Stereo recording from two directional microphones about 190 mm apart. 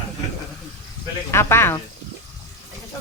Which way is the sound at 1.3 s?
15° left (ahead or behind).